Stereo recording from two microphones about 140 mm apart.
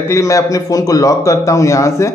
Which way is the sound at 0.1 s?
20° left (ahead or behind).